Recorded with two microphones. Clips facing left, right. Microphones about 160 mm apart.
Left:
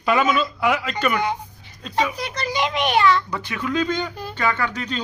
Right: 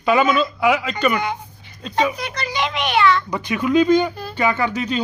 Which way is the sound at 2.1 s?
35° left (ahead or behind).